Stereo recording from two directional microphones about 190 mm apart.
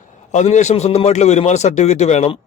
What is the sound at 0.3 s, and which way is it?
A man's voice, 40° left (ahead or behind).